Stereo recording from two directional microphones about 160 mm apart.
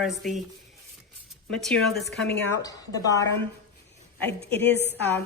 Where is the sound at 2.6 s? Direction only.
20° left (ahead or behind).